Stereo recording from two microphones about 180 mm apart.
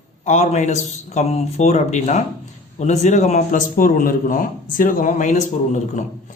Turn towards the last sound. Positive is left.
turn(degrees=40)  # may be behind; listen again after turning